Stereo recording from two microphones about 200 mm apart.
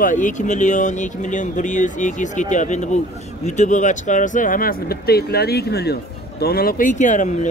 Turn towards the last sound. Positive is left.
turn(degrees=40)  # may be behind; listen again after turning